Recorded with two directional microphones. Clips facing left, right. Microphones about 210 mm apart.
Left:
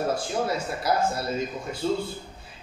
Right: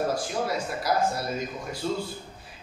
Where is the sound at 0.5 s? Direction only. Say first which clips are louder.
Left 1 dB; 25° left (ahead or behind).